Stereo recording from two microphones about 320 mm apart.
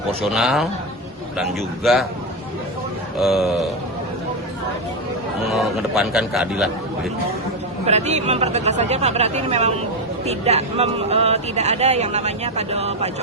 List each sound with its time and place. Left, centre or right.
0.3 s a man's voice: centre
3.2 s a man's voice: centre
5.5 s a man's voice: centre
7.9 s speech: right